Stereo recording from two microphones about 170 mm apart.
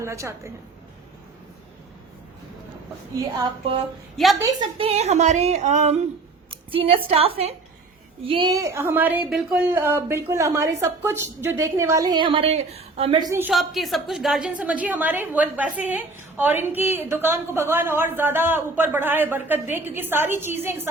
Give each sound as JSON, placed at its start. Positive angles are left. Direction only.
{"t": 0.0, "sound": "a woman's voice", "side_deg": -15}
{"t": 4.2, "sound": "a woman's voice", "side_deg": 0}
{"t": 4.8, "sound": "a woman's voice", "side_deg": -35}
{"t": 13.5, "sound": "a woman's voice", "side_deg": 0}